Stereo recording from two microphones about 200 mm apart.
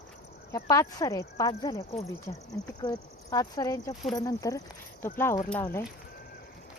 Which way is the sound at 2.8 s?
20° left (ahead or behind).